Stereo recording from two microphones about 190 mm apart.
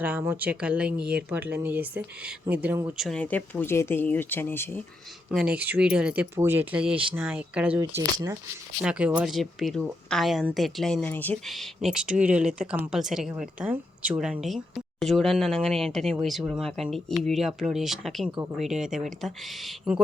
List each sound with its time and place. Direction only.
0.0 s speech: 10° right (ahead or behind)
3.1 s speech: 5° left (ahead or behind)
5.3 s speech: 5° right (ahead or behind)
8.8 s speech: 5° right (ahead or behind)